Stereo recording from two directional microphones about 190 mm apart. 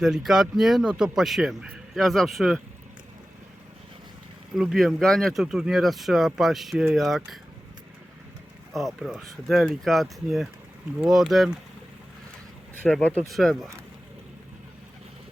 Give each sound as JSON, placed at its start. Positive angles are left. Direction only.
{"t": 0.0, "sound": "speech", "side_deg": 0}
{"t": 4.5, "sound": "speech", "side_deg": 0}
{"t": 8.7, "sound": "speech", "side_deg": 0}
{"t": 12.9, "sound": "speech", "side_deg": 5}